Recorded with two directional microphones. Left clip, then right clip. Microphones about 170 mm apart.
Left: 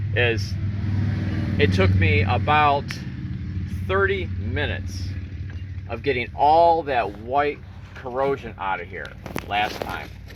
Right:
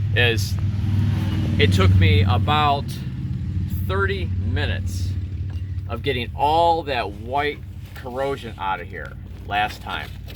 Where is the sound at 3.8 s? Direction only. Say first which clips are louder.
Left 3 dB; 15° left (ahead or behind).